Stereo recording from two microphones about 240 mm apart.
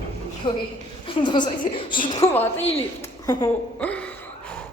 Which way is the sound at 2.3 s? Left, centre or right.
Centre.